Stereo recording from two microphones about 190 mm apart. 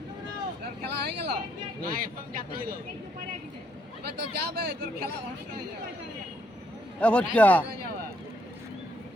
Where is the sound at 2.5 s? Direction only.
50° right (ahead or behind).